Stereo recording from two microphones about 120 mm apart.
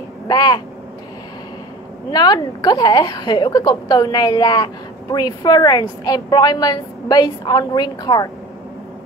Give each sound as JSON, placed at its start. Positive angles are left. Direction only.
{"t": 0.3, "sound": "speech", "side_deg": 35}
{"t": 2.0, "sound": "a woman's voice", "side_deg": 35}